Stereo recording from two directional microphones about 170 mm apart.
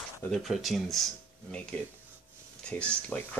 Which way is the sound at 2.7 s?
5° left (ahead or behind).